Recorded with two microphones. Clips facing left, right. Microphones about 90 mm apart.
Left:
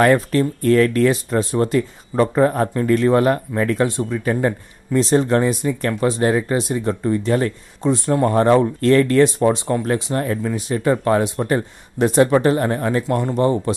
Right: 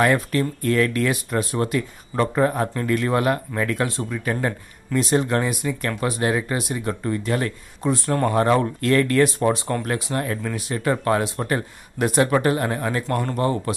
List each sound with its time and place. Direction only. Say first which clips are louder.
0.0 s speech: left 4 dB; 35° left (ahead or behind)